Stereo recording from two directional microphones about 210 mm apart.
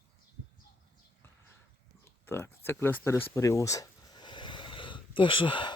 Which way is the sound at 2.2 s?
10° left (ahead or behind).